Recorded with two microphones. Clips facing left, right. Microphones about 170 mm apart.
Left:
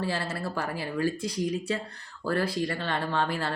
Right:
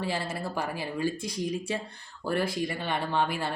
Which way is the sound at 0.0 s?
15° right (ahead or behind).